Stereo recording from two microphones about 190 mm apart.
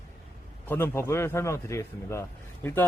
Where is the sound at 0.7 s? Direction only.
10° left (ahead or behind).